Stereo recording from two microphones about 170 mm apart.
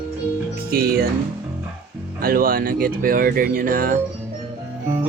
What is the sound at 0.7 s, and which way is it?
Speech, 65° right (ahead or behind).